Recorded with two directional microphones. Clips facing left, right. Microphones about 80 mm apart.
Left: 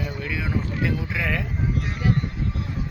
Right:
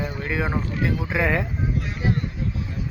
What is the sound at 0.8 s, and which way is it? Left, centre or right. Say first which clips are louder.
Speech: right 3 dB; right.